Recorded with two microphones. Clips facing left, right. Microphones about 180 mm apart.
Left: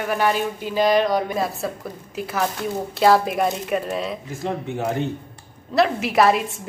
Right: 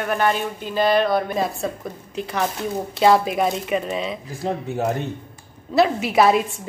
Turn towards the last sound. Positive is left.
turn(degrees=0)  # may be behind; listen again after turning